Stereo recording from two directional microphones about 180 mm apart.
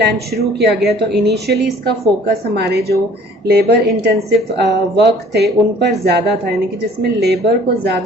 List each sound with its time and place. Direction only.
0.0 s a woman's voice: 65° right (ahead or behind)